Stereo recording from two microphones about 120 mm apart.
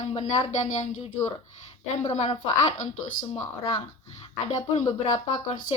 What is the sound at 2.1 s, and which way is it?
Speech, 60° left (ahead or behind).